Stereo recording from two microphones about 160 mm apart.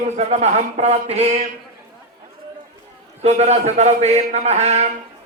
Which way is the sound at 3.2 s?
45° right (ahead or behind).